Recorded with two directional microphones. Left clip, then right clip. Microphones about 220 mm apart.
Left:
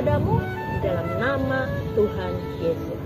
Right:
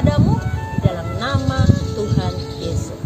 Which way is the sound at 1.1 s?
Centre (ahead or behind).